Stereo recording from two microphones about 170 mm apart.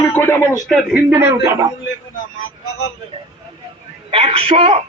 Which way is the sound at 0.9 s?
10° right (ahead or behind).